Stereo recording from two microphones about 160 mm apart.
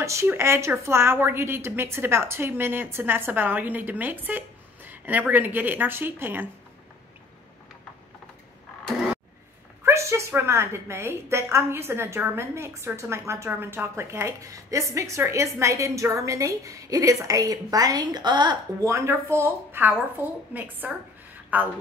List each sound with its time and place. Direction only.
0.0 s a woman's voice: 20° right (ahead or behind)
9.8 s a woman's voice: 15° right (ahead or behind)